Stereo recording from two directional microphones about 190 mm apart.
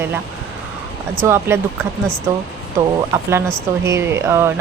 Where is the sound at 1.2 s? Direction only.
15° right (ahead or behind).